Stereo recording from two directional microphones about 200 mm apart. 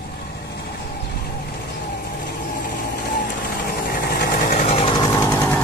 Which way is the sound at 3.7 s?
50° left (ahead or behind).